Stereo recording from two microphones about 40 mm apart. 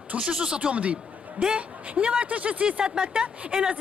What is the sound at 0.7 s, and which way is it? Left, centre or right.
Speech, right.